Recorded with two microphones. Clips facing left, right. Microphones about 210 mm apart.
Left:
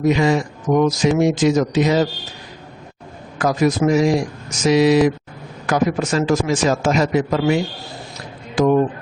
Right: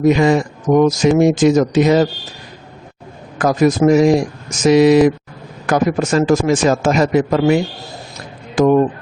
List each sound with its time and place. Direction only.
0.1 s speech: 50° right (ahead or behind)
3.3 s speech: 45° right (ahead or behind)